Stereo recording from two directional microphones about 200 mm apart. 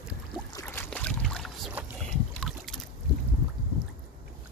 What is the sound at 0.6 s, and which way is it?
Boat, 5° left (ahead or behind).